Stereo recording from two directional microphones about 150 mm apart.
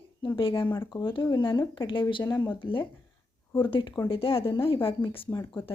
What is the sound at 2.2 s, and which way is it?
Speech, 20° left (ahead or behind).